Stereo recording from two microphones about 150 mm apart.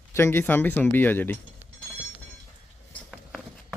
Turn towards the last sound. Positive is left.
turn(degrees=0)  # may be behind; listen again after turning